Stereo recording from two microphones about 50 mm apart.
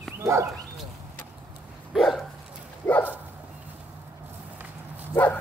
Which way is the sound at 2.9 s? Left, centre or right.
Left.